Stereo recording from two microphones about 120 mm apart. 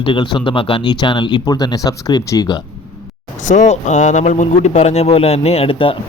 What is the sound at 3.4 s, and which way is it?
Speech, 75° left (ahead or behind).